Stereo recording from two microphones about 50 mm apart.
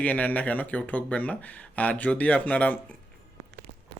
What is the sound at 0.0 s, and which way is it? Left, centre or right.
Speech, left.